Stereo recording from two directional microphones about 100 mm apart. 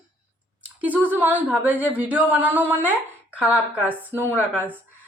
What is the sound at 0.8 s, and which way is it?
A woman's voice, 15° right (ahead or behind).